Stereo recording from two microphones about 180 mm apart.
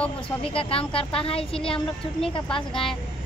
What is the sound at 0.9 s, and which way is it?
Speech, 30° left (ahead or behind).